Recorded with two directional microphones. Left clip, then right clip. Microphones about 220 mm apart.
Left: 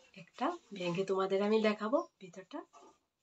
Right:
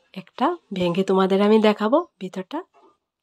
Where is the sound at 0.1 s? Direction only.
55° right (ahead or behind).